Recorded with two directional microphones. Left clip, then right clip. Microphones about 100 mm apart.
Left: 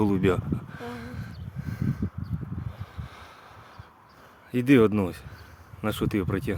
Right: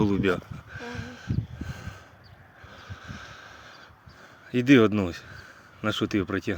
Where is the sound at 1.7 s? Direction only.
20° left (ahead or behind).